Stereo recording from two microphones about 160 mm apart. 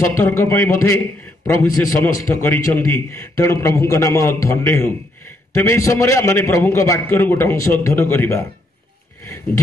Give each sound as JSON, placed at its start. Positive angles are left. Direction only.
{"t": 0.1, "sound": "a man's voice", "side_deg": 15}